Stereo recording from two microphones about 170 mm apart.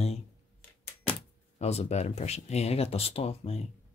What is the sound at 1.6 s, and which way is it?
Speech, 40° left (ahead or behind).